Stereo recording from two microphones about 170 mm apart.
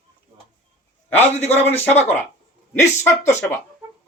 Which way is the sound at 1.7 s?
10° left (ahead or behind).